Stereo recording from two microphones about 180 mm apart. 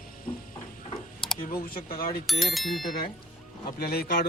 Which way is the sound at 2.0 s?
50° left (ahead or behind).